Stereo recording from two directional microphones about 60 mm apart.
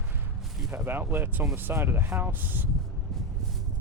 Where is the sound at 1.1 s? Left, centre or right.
Right.